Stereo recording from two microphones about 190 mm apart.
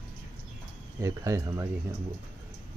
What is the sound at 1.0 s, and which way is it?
Speech, 15° right (ahead or behind).